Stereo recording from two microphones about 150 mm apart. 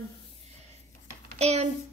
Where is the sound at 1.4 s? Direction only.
45° right (ahead or behind).